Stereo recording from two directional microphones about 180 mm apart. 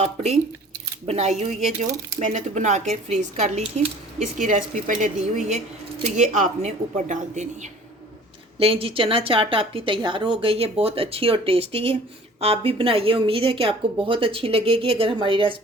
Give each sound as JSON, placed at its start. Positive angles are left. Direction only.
{"t": 0.0, "sound": "a woman's voice", "side_deg": -35}
{"t": 8.5, "sound": "a woman's voice", "side_deg": -30}